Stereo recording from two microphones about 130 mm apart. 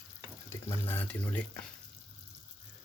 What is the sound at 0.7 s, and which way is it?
Speech, 15° left (ahead or behind).